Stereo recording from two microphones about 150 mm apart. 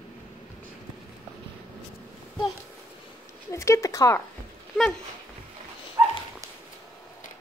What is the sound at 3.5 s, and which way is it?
Speech, 20° left (ahead or behind).